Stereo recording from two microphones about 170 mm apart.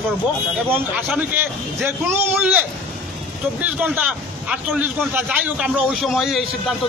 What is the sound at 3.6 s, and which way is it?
A man's voice, 10° right (ahead or behind).